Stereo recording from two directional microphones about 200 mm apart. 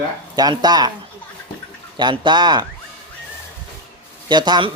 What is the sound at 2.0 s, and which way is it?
Speech, 25° right (ahead or behind).